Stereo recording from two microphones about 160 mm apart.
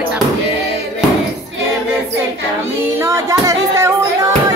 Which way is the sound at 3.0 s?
20° right (ahead or behind).